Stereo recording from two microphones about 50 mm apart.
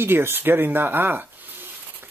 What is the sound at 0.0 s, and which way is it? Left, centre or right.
Speech, right.